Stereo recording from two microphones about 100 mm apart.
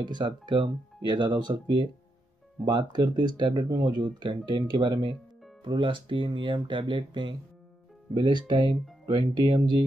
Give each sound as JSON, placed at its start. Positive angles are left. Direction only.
{"t": 0.0, "sound": "speech", "side_deg": -50}